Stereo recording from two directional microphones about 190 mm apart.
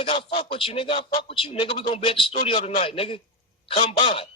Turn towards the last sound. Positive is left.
turn(degrees=30)  # may be behind; listen again after turning